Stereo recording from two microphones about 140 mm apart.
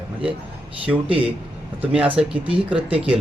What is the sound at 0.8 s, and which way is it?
Speech, 10° right (ahead or behind).